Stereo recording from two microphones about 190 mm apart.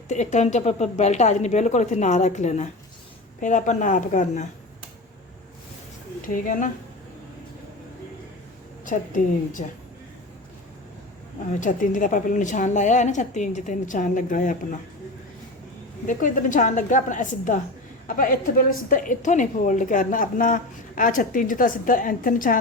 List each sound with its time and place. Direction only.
0.1 s a woman's voice: 40° left (ahead or behind)
6.2 s a woman's voice: 45° left (ahead or behind)
8.8 s a woman's voice: 45° left (ahead or behind)
11.6 s a woman's voice: 45° left (ahead or behind)
16.0 s a woman's voice: 45° left (ahead or behind)